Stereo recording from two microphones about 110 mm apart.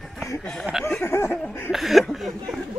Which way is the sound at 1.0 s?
20° left (ahead or behind).